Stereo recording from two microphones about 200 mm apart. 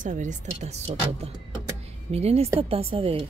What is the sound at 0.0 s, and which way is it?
A woman's voice, 40° right (ahead or behind).